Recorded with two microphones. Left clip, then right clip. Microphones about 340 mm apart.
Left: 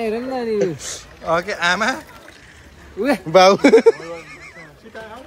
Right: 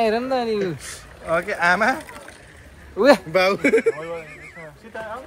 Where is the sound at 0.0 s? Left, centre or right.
Centre.